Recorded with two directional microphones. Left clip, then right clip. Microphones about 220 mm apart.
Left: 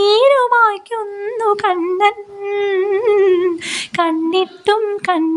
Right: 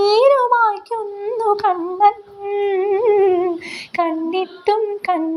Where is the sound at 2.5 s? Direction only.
65° left (ahead or behind).